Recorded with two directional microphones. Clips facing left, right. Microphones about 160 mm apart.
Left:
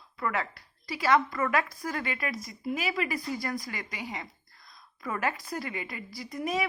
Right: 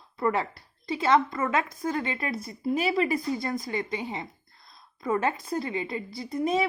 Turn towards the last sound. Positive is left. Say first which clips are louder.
# right 5 dB
turn(degrees=-25)  # may be behind; listen again after turning